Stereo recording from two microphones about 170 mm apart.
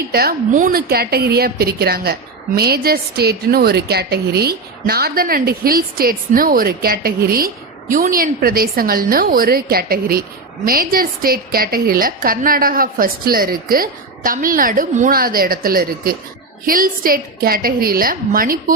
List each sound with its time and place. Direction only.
0.1 s a woman's voice: 65° right (ahead or behind)